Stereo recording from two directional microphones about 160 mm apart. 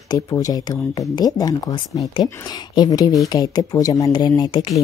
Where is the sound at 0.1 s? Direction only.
25° left (ahead or behind).